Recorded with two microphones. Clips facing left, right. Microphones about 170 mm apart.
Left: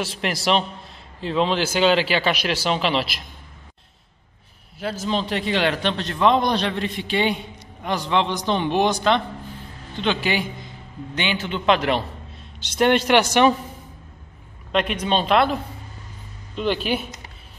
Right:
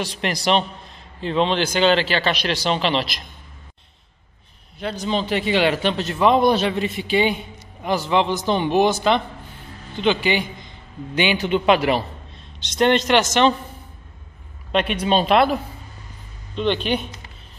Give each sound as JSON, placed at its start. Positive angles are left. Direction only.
{"t": 0.0, "sound": "a man's voice", "side_deg": 5}
{"t": 4.7, "sound": "a man's voice", "side_deg": 5}
{"t": 11.1, "sound": "a man's voice", "side_deg": -15}
{"t": 12.5, "sound": "speech", "side_deg": 10}
{"t": 14.7, "sound": "a man's voice", "side_deg": -5}
{"t": 16.5, "sound": "a man's voice", "side_deg": 5}